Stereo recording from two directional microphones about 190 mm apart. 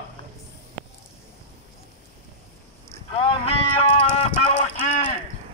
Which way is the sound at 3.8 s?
30° left (ahead or behind).